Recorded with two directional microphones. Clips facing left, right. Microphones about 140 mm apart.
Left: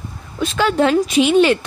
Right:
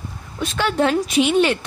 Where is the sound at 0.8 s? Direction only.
90° left.